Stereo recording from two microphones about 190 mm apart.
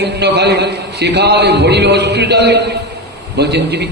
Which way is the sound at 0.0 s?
60° right (ahead or behind).